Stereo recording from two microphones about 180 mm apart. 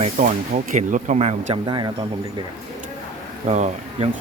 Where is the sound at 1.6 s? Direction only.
25° right (ahead or behind).